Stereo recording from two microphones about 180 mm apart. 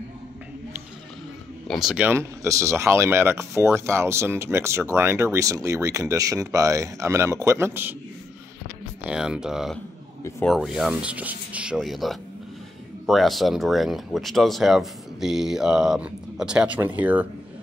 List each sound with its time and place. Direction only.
1.7 s speech: centre (ahead or behind)
2.0 s speech: 15° right (ahead or behind)
9.0 s speech: 5° right (ahead or behind)